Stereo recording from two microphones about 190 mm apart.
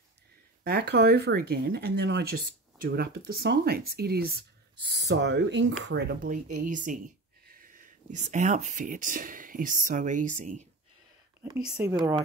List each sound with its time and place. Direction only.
0.7 s speech: 55° right (ahead or behind)
5.9 s speech: 60° right (ahead or behind); by 10.7 s 40° right (ahead or behind)
11.7 s speech: 15° right (ahead or behind)